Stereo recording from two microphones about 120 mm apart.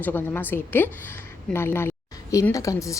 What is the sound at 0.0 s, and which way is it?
A woman's voice, 15° left (ahead or behind).